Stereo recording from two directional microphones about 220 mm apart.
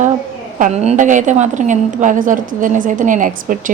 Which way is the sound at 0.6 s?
30° right (ahead or behind).